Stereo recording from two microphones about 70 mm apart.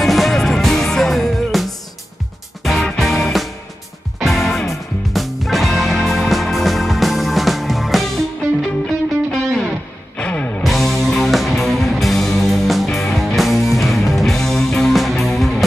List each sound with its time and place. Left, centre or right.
0.0 s music: centre
9.3 s music: centre
10.1 s music: centre
10.6 s music: centre